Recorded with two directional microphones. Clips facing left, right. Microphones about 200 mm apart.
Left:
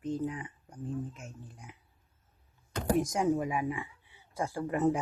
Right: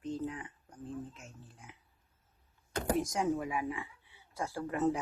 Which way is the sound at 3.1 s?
15° left (ahead or behind).